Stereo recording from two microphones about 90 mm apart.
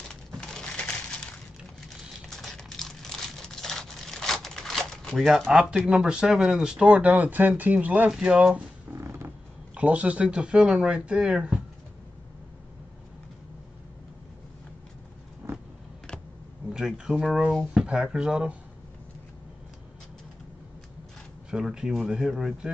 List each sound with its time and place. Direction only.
0.1 s crumpling: 10° left (ahead or behind)
2.2 s crumpling: 5° left (ahead or behind)
5.1 s speech: 5° right (ahead or behind)
8.9 s a sound: 25° right (ahead or behind)
9.8 s speech: 15° right (ahead or behind)
15.4 s vehicle: 30° right (ahead or behind)
16.7 s speech: 5° right (ahead or behind)
21.5 s speech: 10° right (ahead or behind)